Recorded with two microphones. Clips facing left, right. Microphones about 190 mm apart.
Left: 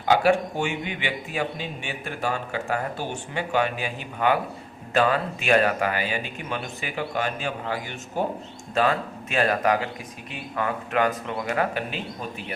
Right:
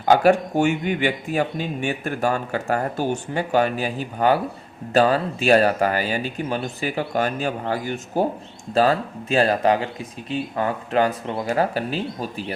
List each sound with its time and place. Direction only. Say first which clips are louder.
0.0 s speech: right 4 dB; 45° right (ahead or behind)